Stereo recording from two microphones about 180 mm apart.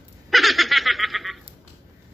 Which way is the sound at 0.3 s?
Centre (ahead or behind).